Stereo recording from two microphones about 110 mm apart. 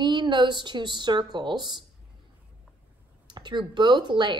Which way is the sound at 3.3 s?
45° right (ahead or behind).